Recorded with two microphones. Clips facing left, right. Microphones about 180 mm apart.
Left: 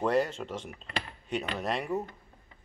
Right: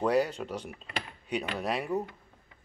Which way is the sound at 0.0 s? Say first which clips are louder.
Right 1 dB; centre (ahead or behind).